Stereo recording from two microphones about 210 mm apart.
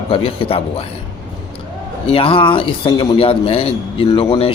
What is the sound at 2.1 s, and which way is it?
Speech, 25° left (ahead or behind).